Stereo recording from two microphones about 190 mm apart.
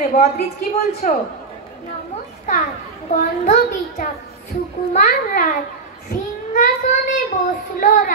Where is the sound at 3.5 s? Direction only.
40° left (ahead or behind).